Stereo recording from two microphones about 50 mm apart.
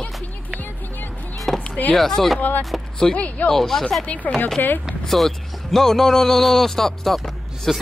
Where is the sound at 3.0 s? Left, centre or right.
Centre.